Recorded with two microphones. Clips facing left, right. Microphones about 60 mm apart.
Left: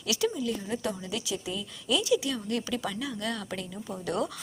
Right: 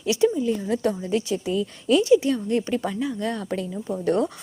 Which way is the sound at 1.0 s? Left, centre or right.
Right.